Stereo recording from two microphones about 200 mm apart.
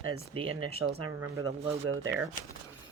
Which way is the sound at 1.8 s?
75° right (ahead or behind).